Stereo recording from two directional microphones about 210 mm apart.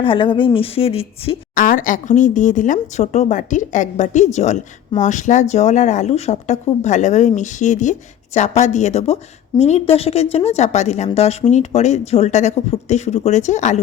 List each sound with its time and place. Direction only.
0.0 s a woman's voice: 25° left (ahead or behind)